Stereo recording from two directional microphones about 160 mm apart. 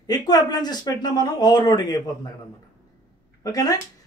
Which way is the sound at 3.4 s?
20° left (ahead or behind).